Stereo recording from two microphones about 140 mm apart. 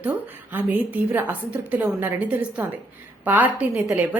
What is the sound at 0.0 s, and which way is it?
A woman's voice, 10° right (ahead or behind).